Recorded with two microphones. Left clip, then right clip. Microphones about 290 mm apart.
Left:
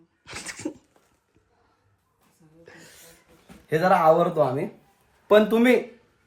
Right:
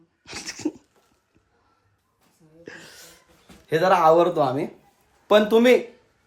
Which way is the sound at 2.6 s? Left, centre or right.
Right.